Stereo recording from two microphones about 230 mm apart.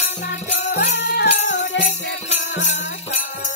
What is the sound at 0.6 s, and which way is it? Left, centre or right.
Music, left.